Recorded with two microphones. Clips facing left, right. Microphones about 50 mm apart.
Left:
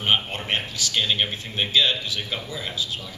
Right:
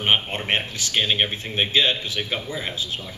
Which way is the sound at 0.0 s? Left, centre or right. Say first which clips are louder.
Right 2 dB; right.